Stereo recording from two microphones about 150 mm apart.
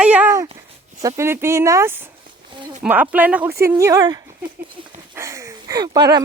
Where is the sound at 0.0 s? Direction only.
10° right (ahead or behind).